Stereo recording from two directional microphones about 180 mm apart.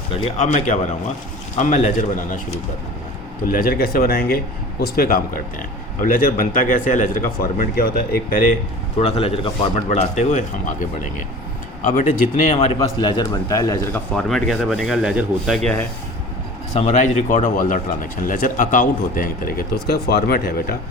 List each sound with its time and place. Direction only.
0.3 s speech: 45° left (ahead or behind)
3.4 s speech: 50° left (ahead or behind)
9.0 s speech: 35° left (ahead or behind)
13.3 s a man's voice: 20° left (ahead or behind)
14.2 s speech: centre (ahead or behind)
16.7 s speech: 40° left (ahead or behind); by 20.7 s 60° left (ahead or behind)